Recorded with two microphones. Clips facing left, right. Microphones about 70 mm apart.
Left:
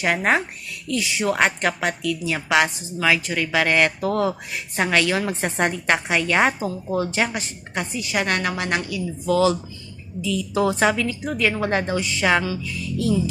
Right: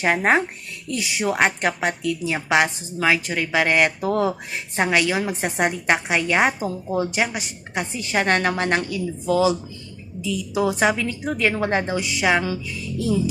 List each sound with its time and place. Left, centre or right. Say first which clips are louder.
0.2 s a woman's voice: right 2 dB; right
7.2 s a woman's voice: even; centre
7.9 s a woman's voice: right 3 dB; right
10.2 s a woman's voice: left 1 dB; centre
11.2 s a woman's voice: right 1 dB; right
11.5 s a woman's voice: even; right
12.4 s a woman's voice: even; right